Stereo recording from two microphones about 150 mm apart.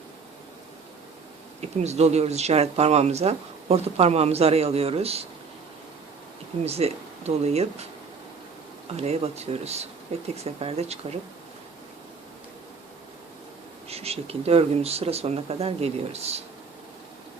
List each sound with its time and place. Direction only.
1.8 s speech: 50° right (ahead or behind)
6.7 s speech: 45° right (ahead or behind)
9.0 s speech: 45° right (ahead or behind)
13.8 s speech: 45° right (ahead or behind)